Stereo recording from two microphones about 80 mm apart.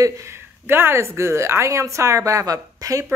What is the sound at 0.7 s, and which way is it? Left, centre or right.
Speech, right.